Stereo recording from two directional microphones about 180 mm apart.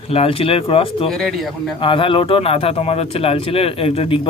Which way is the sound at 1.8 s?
25° left (ahead or behind).